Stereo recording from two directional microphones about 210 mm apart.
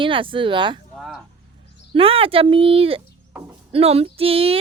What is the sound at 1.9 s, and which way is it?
Speech, 25° right (ahead or behind).